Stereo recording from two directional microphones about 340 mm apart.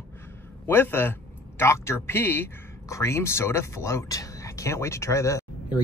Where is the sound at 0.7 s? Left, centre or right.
Centre.